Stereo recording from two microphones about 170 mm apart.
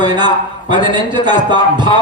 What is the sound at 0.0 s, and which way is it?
A man's voice, 25° right (ahead or behind).